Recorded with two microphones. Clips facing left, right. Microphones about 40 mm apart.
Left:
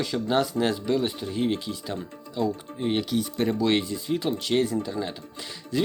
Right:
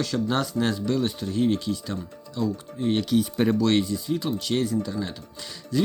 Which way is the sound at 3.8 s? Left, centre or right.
Left.